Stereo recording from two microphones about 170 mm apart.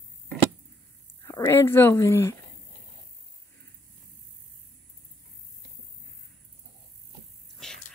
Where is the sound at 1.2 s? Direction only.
15° left (ahead or behind).